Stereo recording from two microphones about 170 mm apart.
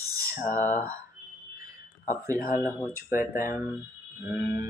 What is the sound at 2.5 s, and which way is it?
Speech, 10° left (ahead or behind).